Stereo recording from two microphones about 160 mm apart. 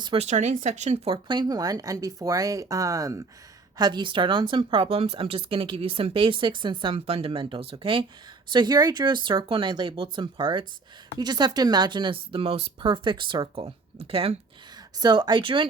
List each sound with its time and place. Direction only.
0.0 s a woman's voice: 35° right (ahead or behind)
14.9 s speech: 25° right (ahead or behind)